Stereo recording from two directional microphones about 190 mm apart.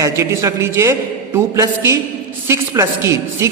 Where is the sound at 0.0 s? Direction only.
15° right (ahead or behind).